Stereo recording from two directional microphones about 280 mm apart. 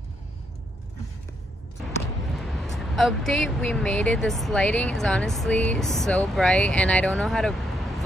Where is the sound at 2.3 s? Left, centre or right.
Centre.